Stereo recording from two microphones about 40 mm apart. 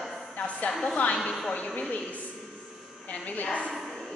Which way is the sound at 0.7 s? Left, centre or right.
Centre.